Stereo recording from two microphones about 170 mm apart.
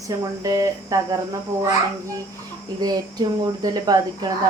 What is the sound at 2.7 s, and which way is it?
Speech, 25° right (ahead or behind).